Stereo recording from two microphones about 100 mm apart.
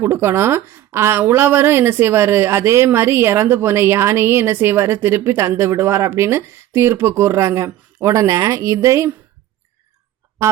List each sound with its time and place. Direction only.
0.0 s speech: 25° right (ahead or behind)
10.4 s speech: 30° right (ahead or behind)